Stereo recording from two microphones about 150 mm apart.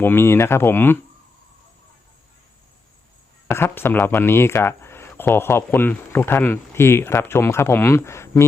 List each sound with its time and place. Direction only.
0.0 s speech: 15° left (ahead or behind)
3.5 s speech: 15° left (ahead or behind)